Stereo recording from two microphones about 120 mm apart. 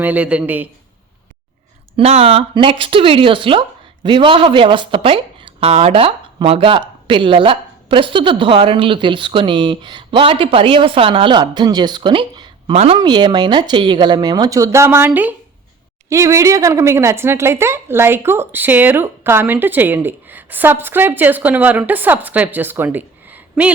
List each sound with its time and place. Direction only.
0.0 s speech: 10° right (ahead or behind)
2.0 s speech: 60° right (ahead or behind); by 12.7 s 45° right (ahead or behind)
12.7 s speech: 60° right (ahead or behind)
13.0 s speech: 35° right (ahead or behind); by 15.4 s 15° right (ahead or behind)
16.0 s speech: 25° right (ahead or behind)